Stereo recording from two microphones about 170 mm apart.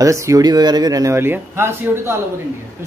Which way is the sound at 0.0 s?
20° right (ahead or behind).